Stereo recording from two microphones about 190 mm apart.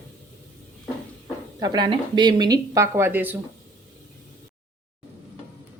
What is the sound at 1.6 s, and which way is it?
Speech, 20° right (ahead or behind).